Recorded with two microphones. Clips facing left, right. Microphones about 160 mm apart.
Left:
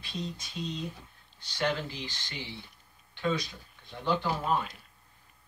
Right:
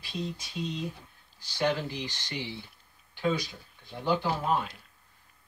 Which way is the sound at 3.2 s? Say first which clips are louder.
Right 2 dB; 10° right (ahead or behind).